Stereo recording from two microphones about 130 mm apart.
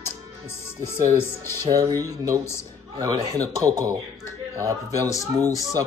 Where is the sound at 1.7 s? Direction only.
30° right (ahead or behind).